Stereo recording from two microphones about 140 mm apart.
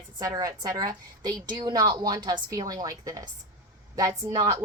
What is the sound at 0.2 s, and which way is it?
A woman's voice, 25° right (ahead or behind).